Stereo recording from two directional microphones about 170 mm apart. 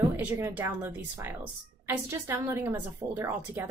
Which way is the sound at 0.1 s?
15° right (ahead or behind).